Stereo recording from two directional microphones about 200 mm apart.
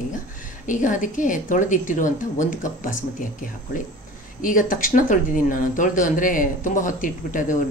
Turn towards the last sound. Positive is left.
turn(degrees=40)  # may be behind; listen again after turning